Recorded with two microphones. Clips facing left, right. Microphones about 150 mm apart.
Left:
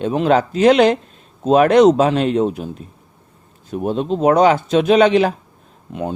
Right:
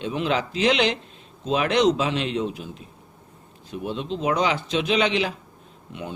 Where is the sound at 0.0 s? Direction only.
45° left (ahead or behind).